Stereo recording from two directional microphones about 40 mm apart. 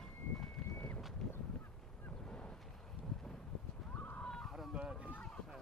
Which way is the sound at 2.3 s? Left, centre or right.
Left.